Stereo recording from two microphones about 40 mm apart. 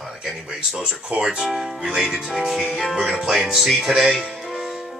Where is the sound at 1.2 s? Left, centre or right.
Centre.